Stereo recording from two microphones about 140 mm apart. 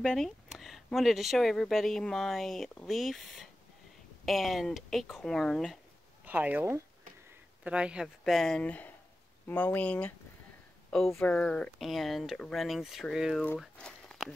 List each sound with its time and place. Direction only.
0.0 s speech: centre (ahead or behind)
6.2 s speech: 10° right (ahead or behind); by 10.1 s 10° left (ahead or behind)
11.1 s speech: 5° left (ahead or behind)
13.6 s a sound: 5° left (ahead or behind)